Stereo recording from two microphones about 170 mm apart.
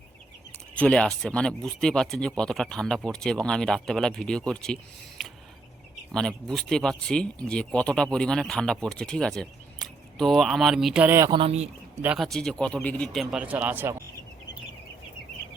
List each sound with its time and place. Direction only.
0.8 s speech: 5° left (ahead or behind); by 11.3 s 15° right (ahead or behind)
11.3 s speech: 35° right (ahead or behind)
12.0 s speech: centre (ahead or behind)
13.3 s speech: 10° right (ahead or behind)